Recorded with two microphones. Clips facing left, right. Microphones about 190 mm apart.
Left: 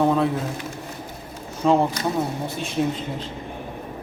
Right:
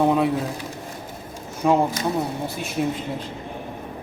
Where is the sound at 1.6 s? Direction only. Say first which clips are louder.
Left 1 dB; 10° right (ahead or behind).